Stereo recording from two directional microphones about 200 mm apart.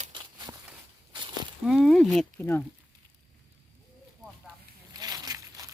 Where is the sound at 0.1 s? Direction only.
20° right (ahead or behind).